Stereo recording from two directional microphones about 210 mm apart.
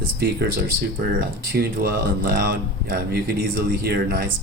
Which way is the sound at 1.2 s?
45° right (ahead or behind).